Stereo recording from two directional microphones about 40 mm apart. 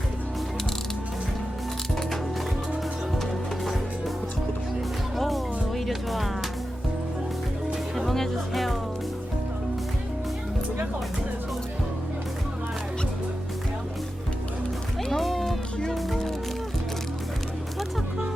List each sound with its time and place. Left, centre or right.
3.2 s music: centre
5.1 s music: centre
7.9 s music: centre
15.1 s music: centre
16.0 s a sound: centre